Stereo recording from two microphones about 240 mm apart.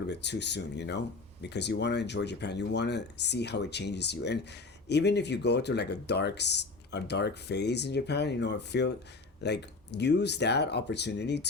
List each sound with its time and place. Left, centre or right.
0.1 s speech: left